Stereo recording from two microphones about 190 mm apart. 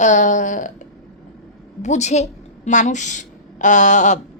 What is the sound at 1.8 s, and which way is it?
A woman's voice, 40° left (ahead or behind).